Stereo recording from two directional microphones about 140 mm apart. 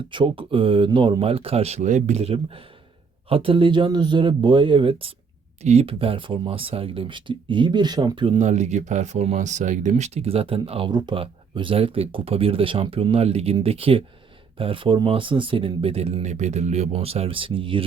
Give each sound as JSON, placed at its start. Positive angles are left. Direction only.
{"t": 0.1, "sound": "speech", "side_deg": -35}
{"t": 8.4, "sound": "speech", "side_deg": -55}